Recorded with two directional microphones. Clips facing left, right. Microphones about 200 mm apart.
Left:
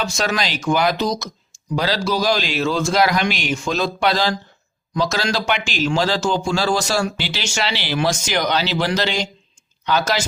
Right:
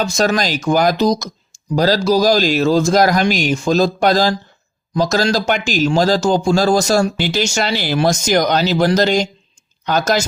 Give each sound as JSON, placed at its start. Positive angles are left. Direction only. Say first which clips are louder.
{"t": 0.0, "sound": "speech", "louder": "right 6 dB", "side_deg": -40}